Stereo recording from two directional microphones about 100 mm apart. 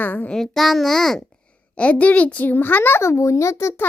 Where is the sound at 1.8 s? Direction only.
15° left (ahead or behind).